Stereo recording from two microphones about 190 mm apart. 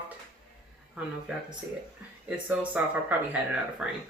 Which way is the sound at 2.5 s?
10° right (ahead or behind).